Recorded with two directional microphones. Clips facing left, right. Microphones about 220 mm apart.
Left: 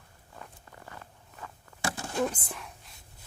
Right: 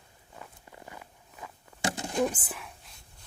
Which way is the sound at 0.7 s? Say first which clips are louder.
Right 1 dB; 15° right (ahead or behind).